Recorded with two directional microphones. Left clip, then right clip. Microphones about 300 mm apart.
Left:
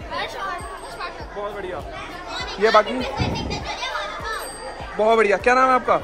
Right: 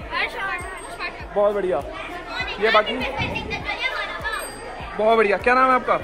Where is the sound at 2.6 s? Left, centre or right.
Left.